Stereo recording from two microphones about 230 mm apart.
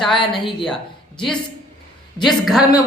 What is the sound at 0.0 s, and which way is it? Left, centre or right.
Speech, left.